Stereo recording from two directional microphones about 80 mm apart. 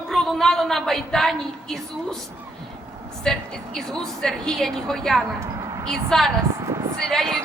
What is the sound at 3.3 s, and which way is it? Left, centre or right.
A woman's voice, centre.